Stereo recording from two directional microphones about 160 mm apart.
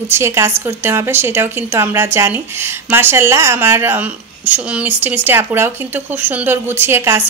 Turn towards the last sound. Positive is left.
turn(degrees=-15)  # may be behind; listen again after turning